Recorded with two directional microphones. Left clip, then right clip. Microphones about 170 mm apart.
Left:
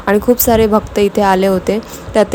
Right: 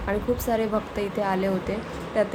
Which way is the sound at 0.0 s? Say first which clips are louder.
Left 14 dB; 45° left (ahead or behind).